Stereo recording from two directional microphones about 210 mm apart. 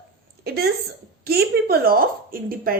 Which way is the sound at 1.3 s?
45° right (ahead or behind).